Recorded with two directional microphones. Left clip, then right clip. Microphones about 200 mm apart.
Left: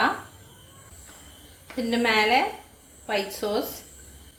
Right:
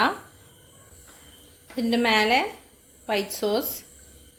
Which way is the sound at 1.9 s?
50° right (ahead or behind).